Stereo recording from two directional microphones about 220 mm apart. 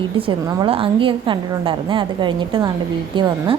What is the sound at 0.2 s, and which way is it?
A woman's voice, 25° right (ahead or behind).